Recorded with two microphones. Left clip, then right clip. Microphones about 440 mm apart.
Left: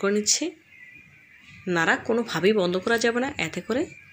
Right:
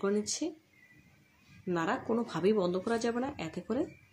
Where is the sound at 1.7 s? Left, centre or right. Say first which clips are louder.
Left 10 dB; left.